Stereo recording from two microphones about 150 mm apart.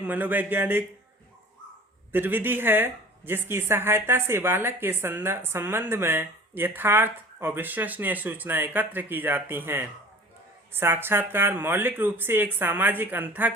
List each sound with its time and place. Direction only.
0.0 s speech: 10° right (ahead or behind)
2.1 s speech: 15° right (ahead or behind)